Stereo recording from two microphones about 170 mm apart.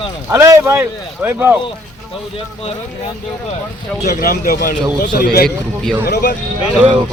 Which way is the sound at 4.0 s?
65° left (ahead or behind).